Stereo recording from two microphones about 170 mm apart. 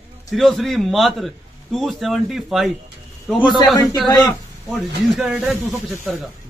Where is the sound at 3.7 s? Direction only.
20° left (ahead or behind).